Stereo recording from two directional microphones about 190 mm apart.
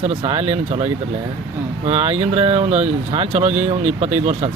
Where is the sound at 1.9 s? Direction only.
30° right (ahead or behind).